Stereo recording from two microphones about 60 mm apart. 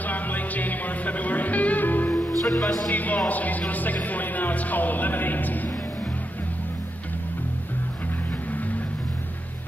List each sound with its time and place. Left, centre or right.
0.0 s music: left
2.6 s music: centre
2.9 s a man's voice: left